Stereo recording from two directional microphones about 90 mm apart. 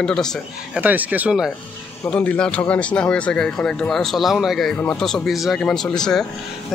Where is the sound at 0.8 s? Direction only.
20° right (ahead or behind).